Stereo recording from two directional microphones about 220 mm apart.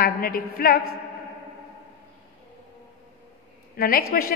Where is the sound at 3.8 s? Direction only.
45° left (ahead or behind).